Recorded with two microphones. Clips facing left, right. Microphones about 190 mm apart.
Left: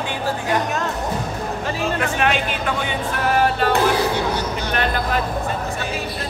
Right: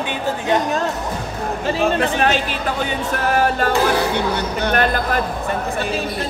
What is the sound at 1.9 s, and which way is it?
Speech, 35° right (ahead or behind).